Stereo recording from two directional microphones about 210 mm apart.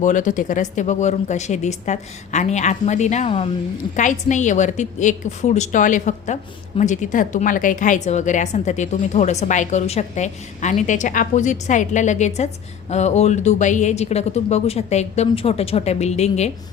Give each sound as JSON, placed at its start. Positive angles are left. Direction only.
{"t": 0.0, "sound": "a woman's voice", "side_deg": 35}